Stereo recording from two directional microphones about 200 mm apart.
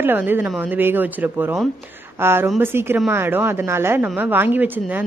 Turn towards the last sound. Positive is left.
turn(degrees=-10)  # may be behind; listen again after turning